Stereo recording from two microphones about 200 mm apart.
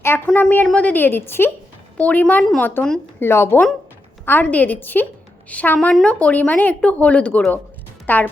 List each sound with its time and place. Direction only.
0.0 s speech: 10° left (ahead or behind)